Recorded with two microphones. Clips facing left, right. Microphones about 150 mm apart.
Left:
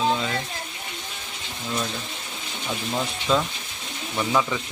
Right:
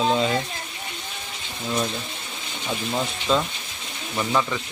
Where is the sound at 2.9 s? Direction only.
5° right (ahead or behind).